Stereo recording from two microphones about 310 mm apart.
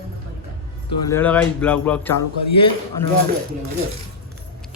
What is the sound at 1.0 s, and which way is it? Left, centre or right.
A man's voice, centre.